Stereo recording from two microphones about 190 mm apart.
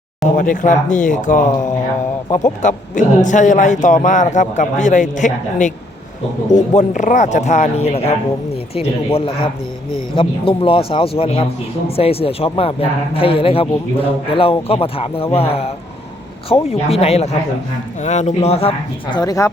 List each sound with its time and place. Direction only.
0.3 s a man's voice: 45° left (ahead or behind)
9.1 s a man's voice: 30° left (ahead or behind)
19.1 s a man's voice: 20° left (ahead or behind)